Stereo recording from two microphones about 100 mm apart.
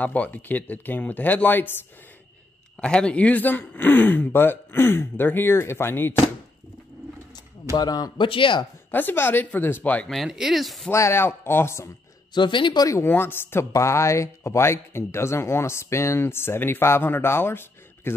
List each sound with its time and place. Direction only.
0.0 s speech: 15° left (ahead or behind)
2.8 s speech: 10° left (ahead or behind)
7.7 s speech: 40° left (ahead or behind)
8.3 s speech: 55° left (ahead or behind)
8.9 s speech: 20° left (ahead or behind)
10.0 s speech: centre (ahead or behind)
10.9 s speech: 25° left (ahead or behind)
12.4 s speech: 50° left (ahead or behind)
12.8 s speech: 25° left (ahead or behind)